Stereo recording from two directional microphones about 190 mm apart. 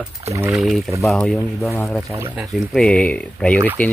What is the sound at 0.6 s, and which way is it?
Speech, centre (ahead or behind).